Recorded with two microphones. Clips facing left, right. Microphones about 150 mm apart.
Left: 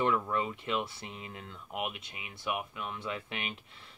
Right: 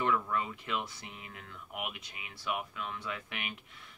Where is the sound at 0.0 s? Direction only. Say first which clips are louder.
Left 2 dB; 25° left (ahead or behind).